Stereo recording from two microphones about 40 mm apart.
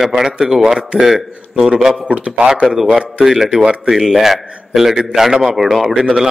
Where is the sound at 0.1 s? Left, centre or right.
Centre.